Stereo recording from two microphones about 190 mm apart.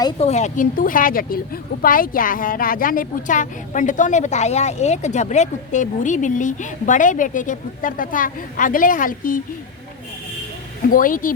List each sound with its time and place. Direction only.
0.2 s a woman's voice: 35° left (ahead or behind)
10.8 s a woman's voice: 45° left (ahead or behind)